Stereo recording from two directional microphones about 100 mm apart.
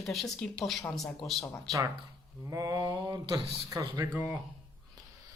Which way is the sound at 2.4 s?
35° right (ahead or behind).